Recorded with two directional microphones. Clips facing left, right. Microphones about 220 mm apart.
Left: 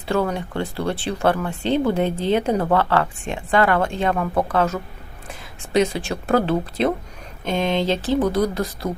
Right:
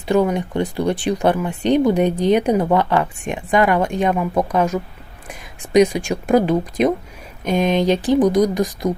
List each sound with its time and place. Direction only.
0.1 s speech: 15° right (ahead or behind)